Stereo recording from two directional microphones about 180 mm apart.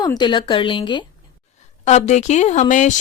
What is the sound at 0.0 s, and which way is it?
Speech, 25° left (ahead or behind).